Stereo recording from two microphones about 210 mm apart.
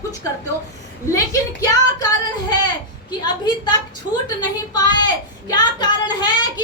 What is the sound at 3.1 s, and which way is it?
A woman's voice, 20° left (ahead or behind).